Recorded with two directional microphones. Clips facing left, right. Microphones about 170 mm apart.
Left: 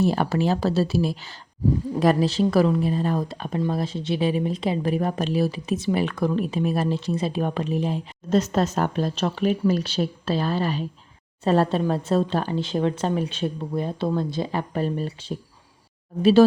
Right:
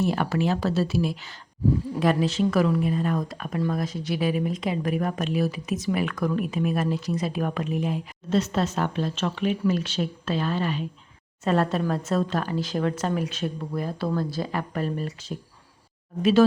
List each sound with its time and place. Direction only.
0.0 s a woman's voice: 35° left (ahead or behind)